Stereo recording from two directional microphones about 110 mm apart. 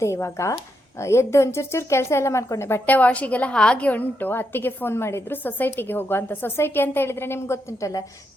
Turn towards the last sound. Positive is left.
turn(degrees=30)  # may be behind; listen again after turning